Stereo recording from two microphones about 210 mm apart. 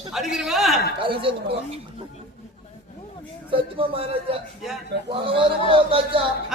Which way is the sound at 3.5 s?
25° right (ahead or behind).